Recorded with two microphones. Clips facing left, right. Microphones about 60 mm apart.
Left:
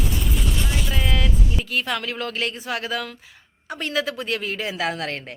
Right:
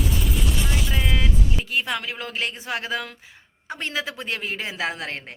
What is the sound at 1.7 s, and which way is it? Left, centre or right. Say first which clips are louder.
A woman's voice: left 1 dB; centre.